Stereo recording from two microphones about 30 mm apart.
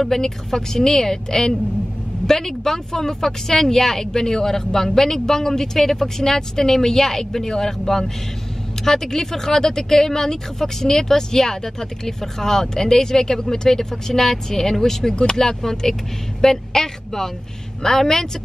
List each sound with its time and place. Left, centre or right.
0.0 s speech: centre